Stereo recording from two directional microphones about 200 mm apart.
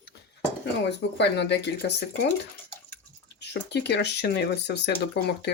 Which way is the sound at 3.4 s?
55° left (ahead or behind).